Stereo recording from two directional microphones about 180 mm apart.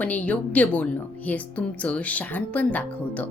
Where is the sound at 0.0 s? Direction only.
10° left (ahead or behind).